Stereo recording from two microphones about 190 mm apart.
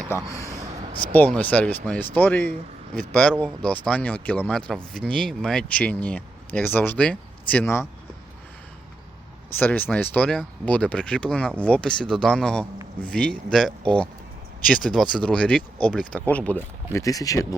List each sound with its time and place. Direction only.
0.3 s speech: 15° left (ahead or behind)
9.6 s speech: 10° left (ahead or behind)